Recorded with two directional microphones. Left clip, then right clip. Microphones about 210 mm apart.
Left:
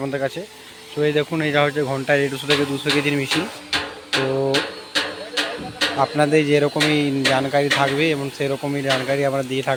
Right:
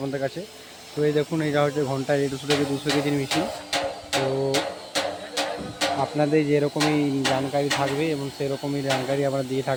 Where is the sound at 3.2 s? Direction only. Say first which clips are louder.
Left 3 dB; 60° right (ahead or behind).